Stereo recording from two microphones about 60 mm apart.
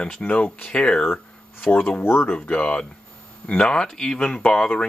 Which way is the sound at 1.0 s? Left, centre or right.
Left.